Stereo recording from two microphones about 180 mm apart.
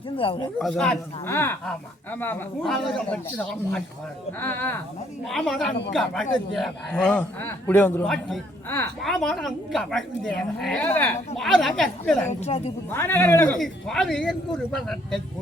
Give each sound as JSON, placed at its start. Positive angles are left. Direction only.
{"t": 0.2, "sound": "speech", "side_deg": 25}
{"t": 0.6, "sound": "a man's voice", "side_deg": 5}
{"t": 5.2, "sound": "a man's voice", "side_deg": 0}
{"t": 12.3, "sound": "a woman's voice", "side_deg": 35}
{"t": 12.9, "sound": "a man's voice", "side_deg": 15}